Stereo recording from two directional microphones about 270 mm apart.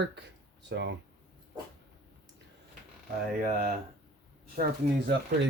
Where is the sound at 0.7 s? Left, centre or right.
Right.